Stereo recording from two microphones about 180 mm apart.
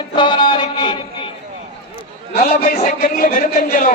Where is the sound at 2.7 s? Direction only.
50° left (ahead or behind).